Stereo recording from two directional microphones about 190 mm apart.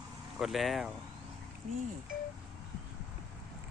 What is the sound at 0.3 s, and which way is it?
Speech, centre (ahead or behind).